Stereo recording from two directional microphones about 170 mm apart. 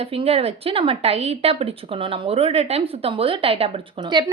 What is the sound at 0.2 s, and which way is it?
A woman's voice, 35° right (ahead or behind).